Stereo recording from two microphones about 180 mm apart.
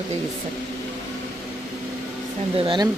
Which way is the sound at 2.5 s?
25° right (ahead or behind).